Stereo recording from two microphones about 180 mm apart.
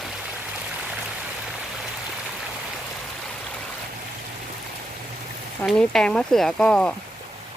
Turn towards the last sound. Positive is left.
turn(degrees=5)  # may be behind; listen again after turning